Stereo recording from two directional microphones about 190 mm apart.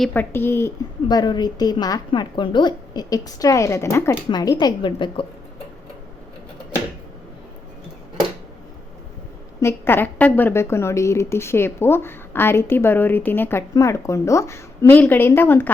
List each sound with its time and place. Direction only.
0.0 s a woman's voice: 10° left (ahead or behind); by 5.2 s 25° left (ahead or behind)
9.6 s a woman's voice: 15° left (ahead or behind)